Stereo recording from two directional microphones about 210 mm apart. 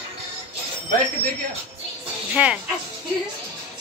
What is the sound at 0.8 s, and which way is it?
Speech, 35° right (ahead or behind).